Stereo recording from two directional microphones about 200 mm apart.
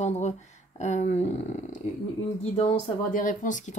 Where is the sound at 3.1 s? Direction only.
40° left (ahead or behind).